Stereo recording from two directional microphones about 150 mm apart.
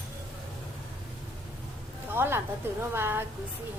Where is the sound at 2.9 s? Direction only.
15° right (ahead or behind).